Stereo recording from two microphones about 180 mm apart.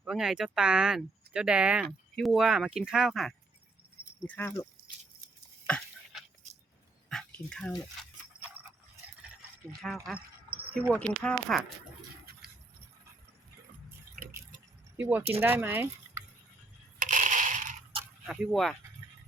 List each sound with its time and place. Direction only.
0.0 s speech: 5° right (ahead or behind)
4.3 s speech: 10° left (ahead or behind)
5.6 s a sound: 5° left (ahead or behind)
7.1 s drip: 5° left (ahead or behind)
9.8 s speech: centre (ahead or behind)
14.2 s a sound: 50° right (ahead or behind)
14.9 s speech: 10° right (ahead or behind)
17.0 s crushing: 45° right (ahead or behind)
18.3 s speech: 5° right (ahead or behind)